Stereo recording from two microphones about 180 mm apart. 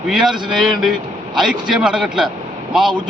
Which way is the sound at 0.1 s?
5° right (ahead or behind).